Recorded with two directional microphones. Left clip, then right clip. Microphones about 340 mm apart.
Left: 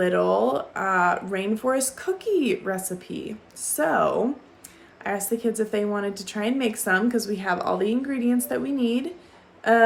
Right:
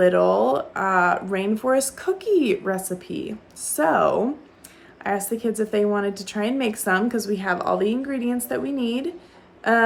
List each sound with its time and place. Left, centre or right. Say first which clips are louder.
0.0 s a woman's voice: right 4 dB; centre